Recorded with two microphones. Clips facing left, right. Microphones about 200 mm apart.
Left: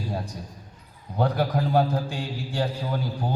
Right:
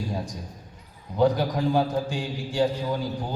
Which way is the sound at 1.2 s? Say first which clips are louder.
Right 3 dB; 60° left (ahead or behind).